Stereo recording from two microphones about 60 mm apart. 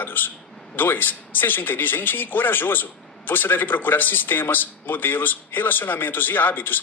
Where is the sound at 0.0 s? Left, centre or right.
Left.